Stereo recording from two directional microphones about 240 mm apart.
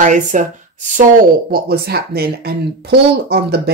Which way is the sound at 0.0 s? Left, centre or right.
Right.